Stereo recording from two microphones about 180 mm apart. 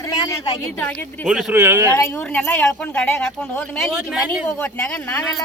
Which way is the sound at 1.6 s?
15° right (ahead or behind).